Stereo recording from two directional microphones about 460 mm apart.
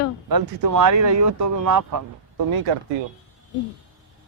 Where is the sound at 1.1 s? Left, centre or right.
Right.